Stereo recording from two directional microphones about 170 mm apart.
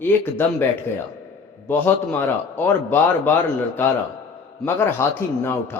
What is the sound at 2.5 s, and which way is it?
Speech, 10° left (ahead or behind).